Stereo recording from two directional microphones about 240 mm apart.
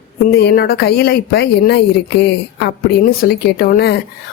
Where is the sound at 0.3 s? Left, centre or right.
Left.